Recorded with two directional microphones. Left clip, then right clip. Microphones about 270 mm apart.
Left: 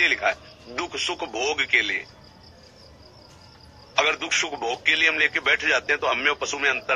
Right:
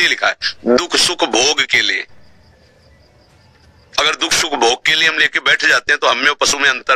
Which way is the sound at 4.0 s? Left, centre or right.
Right.